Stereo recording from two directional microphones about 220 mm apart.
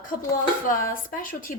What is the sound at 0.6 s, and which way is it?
Speech, 40° left (ahead or behind).